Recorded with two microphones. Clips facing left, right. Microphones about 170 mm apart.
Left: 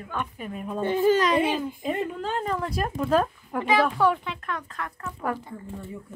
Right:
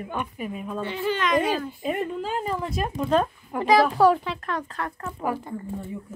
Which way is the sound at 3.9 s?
35° right (ahead or behind).